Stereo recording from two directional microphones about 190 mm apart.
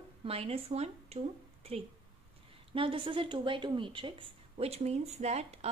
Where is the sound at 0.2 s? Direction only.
30° right (ahead or behind).